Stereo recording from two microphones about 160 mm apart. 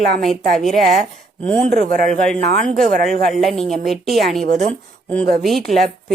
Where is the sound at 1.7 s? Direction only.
55° right (ahead or behind).